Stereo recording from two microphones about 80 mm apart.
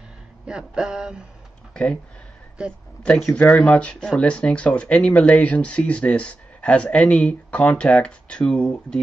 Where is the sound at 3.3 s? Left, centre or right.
Centre.